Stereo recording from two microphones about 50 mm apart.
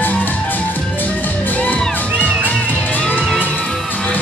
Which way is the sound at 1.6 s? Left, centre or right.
Left.